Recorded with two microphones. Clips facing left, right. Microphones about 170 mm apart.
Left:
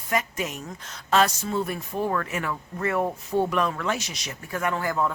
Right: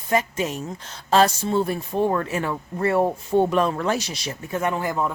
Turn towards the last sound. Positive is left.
turn(degrees=-20)  # may be behind; listen again after turning